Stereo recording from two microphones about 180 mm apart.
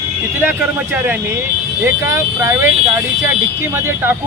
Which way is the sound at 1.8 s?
15° right (ahead or behind).